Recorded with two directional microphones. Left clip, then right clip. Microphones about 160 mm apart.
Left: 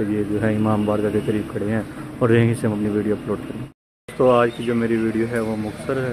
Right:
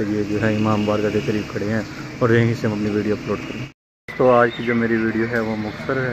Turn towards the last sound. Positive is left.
turn(degrees=15)  # may be behind; listen again after turning